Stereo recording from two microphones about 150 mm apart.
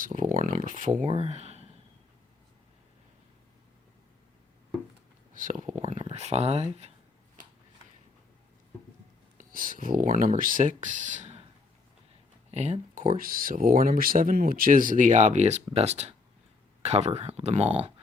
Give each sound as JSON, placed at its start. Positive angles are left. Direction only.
{"t": 0.0, "sound": "speech", "side_deg": -60}
{"t": 1.1, "sound": "a sound", "side_deg": -45}
{"t": 5.3, "sound": "speech", "side_deg": -60}
{"t": 5.8, "sound": "a sound", "side_deg": -55}
{"t": 6.1, "sound": "speech", "side_deg": -45}
{"t": 9.4, "sound": "speech", "side_deg": -65}
{"t": 12.5, "sound": "speech", "side_deg": -45}